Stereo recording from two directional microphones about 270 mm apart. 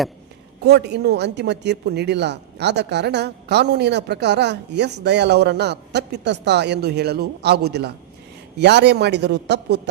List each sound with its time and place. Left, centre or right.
0.6 s speech: right